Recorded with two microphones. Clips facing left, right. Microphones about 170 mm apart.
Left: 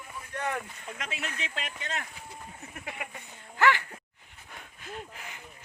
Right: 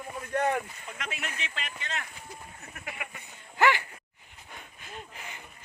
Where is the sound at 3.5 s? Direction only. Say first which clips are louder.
Even; 15° right (ahead or behind).